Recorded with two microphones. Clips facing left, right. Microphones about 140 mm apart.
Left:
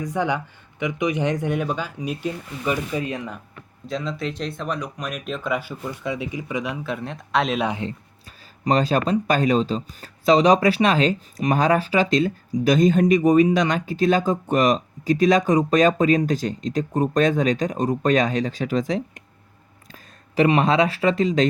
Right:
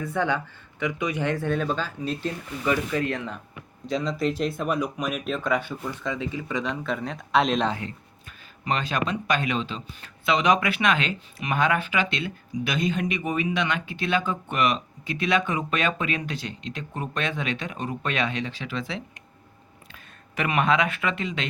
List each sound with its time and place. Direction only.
0.0 s speech: 15° left (ahead or behind)
3.8 s speech: centre (ahead or behind)
7.7 s speech: 25° left (ahead or behind)
8.6 s speech: 35° left (ahead or behind)